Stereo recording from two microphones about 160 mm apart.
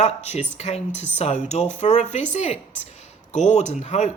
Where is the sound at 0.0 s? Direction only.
45° left (ahead or behind).